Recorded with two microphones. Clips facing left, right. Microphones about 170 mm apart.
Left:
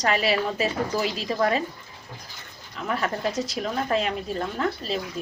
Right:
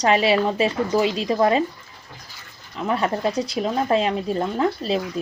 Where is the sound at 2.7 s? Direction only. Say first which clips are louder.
Right 5 dB; 30° right (ahead or behind).